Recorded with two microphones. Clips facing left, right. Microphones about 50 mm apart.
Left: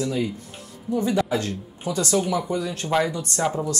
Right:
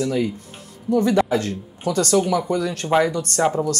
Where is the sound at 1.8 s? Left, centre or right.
Right.